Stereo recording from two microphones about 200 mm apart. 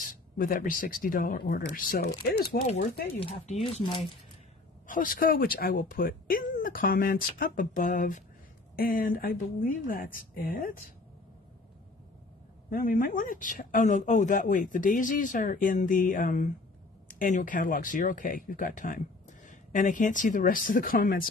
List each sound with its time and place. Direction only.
0.0 s speech: 45° left (ahead or behind)
2.6 s speech: 35° left (ahead or behind)
4.8 s speech: 45° left (ahead or behind)
12.6 s speech: 45° left (ahead or behind)